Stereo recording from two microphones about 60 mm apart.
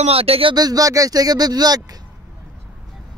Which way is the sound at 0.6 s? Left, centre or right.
Right.